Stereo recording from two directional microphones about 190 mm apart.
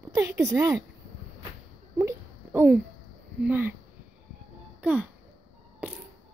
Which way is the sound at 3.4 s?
10° right (ahead or behind).